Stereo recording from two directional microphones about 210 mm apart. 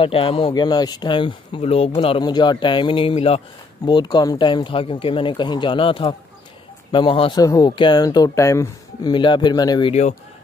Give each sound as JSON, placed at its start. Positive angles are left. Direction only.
{"t": 0.0, "sound": "speech", "side_deg": 25}